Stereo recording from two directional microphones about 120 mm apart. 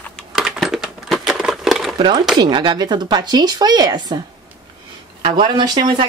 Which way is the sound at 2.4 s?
40° right (ahead or behind).